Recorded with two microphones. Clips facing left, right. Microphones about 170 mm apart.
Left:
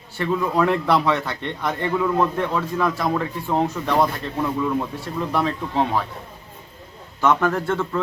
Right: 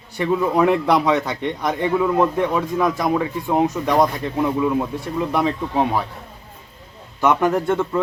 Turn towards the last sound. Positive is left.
turn(degrees=-15)  # may be behind; listen again after turning